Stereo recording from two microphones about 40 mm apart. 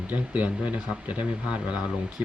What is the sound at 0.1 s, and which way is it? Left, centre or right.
Speech, right.